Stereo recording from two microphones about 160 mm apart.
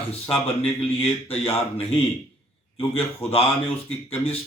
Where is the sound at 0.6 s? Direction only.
40° left (ahead or behind).